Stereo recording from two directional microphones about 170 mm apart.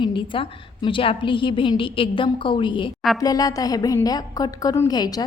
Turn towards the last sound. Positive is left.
turn(degrees=25)  # may be behind; listen again after turning